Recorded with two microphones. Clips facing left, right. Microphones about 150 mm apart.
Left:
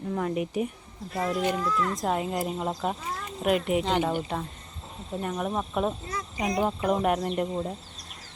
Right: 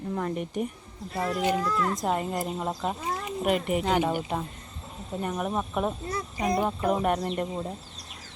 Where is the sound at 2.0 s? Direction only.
Centre (ahead or behind).